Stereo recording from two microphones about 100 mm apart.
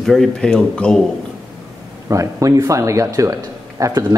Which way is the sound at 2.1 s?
35° right (ahead or behind).